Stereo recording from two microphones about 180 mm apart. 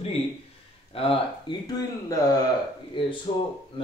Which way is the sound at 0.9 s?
30° left (ahead or behind).